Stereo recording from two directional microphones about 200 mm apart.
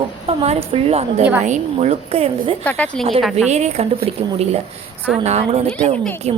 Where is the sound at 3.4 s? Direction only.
35° right (ahead or behind).